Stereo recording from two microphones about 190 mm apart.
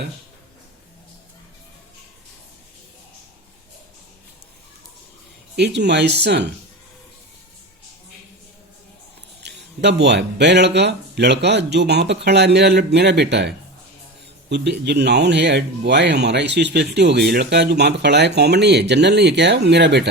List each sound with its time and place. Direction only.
5.5 s speech: 65° right (ahead or behind)
9.4 s speech: 65° right (ahead or behind)
14.5 s speech: 65° right (ahead or behind)